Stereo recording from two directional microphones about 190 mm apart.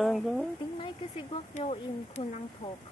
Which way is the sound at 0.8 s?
30° left (ahead or behind).